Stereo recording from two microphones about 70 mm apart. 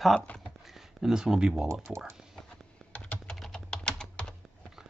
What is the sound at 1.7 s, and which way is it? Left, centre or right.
Speech, right.